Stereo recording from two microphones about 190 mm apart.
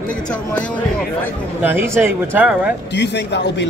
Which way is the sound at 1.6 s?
10° right (ahead or behind).